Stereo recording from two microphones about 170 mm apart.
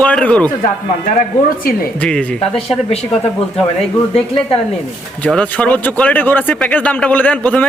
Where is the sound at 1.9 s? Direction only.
5° left (ahead or behind).